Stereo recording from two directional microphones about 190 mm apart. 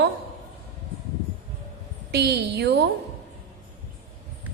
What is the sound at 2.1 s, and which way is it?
Speech, 60° right (ahead or behind).